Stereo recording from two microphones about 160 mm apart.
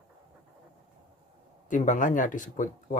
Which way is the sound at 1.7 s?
50° left (ahead or behind).